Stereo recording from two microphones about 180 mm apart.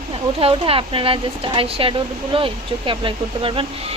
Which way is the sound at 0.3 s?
30° right (ahead or behind).